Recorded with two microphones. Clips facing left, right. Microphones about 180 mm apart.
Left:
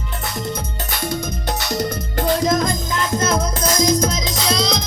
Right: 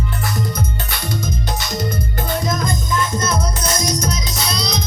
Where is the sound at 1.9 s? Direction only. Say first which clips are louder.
Left 3 dB; 90° left.